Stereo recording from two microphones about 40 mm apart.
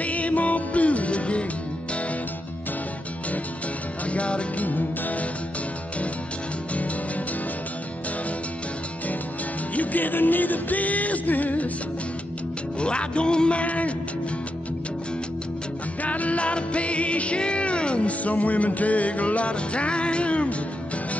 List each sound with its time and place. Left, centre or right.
0.0 s music: left
4.0 s music: left
4.6 s music: left
9.8 s music: left
12.8 s speech: left
16.0 s music: left